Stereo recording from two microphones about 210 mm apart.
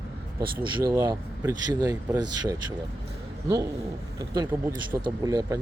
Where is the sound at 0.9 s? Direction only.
15° right (ahead or behind).